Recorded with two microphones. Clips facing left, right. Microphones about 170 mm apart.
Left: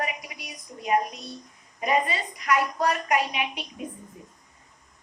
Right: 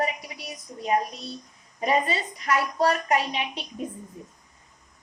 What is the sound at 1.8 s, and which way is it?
A woman's voice, 30° right (ahead or behind).